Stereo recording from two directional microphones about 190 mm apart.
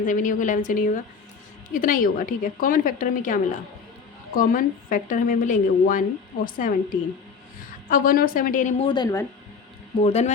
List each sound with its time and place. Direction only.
0.0 s a woman's voice: 45° left (ahead or behind)
8.9 s speech: 20° left (ahead or behind)
10.0 s a man's voice: 35° left (ahead or behind)